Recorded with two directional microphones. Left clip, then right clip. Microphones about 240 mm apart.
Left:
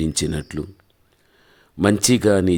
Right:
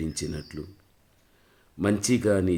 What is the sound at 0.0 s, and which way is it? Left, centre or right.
Speech, left.